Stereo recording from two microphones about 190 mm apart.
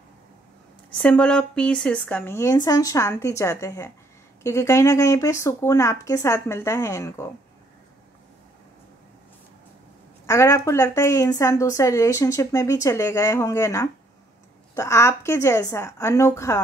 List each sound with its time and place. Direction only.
1.0 s a woman's voice: 5° left (ahead or behind)
10.2 s a woman's voice: 15° left (ahead or behind)